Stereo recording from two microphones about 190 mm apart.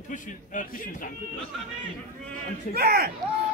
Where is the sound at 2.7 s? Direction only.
55° right (ahead or behind).